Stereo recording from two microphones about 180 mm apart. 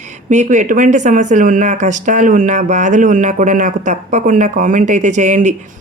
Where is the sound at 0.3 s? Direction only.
45° right (ahead or behind).